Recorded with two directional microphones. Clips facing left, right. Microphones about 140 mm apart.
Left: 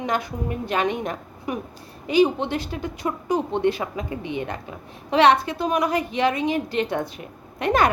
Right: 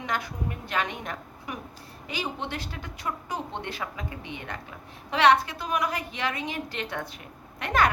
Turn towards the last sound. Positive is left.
turn(degrees=20)  # may be behind; listen again after turning